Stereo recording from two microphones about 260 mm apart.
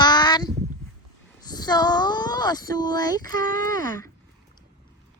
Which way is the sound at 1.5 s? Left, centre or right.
Centre.